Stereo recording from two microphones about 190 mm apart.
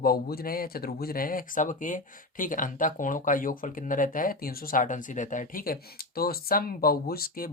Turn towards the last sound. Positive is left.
turn(degrees=50)  # may be behind; listen again after turning